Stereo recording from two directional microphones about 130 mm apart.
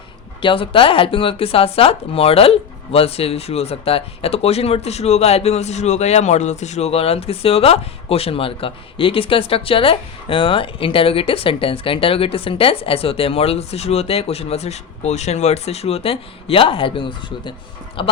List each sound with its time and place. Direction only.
0.4 s speech: 40° left (ahead or behind)